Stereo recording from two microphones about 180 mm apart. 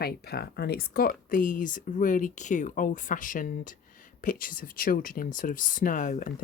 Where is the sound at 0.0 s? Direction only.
60° left (ahead or behind).